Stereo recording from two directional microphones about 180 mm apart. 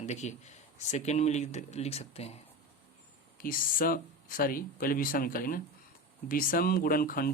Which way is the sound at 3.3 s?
50° left (ahead or behind).